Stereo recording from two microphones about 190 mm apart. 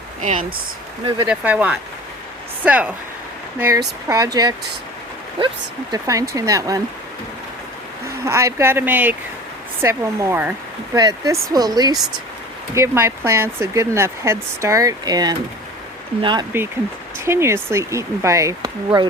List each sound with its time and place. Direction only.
0.2 s speech: 40° right (ahead or behind)
1.2 s speech: 10° right (ahead or behind)
4.1 s speech: 20° right (ahead or behind)
5.9 s speech: 15° right (ahead or behind)
8.0 s speech: 15° right (ahead or behind)